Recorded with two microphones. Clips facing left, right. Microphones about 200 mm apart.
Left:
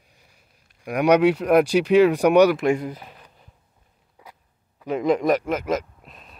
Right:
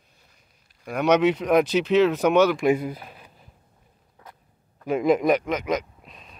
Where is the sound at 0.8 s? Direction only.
10° left (ahead or behind).